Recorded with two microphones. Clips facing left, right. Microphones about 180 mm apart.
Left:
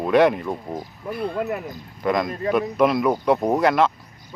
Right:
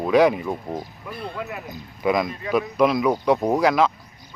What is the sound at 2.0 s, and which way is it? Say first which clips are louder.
Speech: even; 5° right (ahead or behind).